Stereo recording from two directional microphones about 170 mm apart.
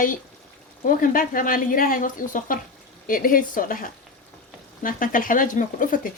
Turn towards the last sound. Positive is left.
turn(degrees=50)  # may be behind; listen again after turning